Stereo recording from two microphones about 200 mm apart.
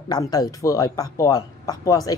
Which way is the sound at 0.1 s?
20° left (ahead or behind).